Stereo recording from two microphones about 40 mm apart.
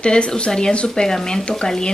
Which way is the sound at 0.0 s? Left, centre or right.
Left.